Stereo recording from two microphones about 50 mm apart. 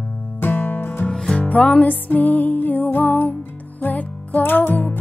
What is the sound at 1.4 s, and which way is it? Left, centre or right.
Music, left.